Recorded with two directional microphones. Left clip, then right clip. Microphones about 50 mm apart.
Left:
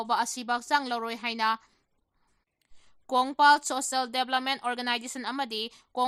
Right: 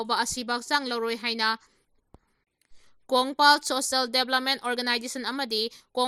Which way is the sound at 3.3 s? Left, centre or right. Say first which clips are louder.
Even; right.